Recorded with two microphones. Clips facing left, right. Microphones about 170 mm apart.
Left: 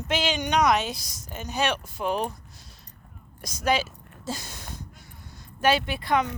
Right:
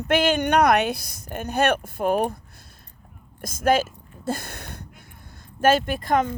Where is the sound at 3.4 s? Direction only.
50° right (ahead or behind).